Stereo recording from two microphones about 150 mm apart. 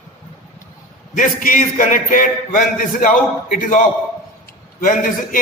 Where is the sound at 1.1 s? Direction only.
60° left (ahead or behind).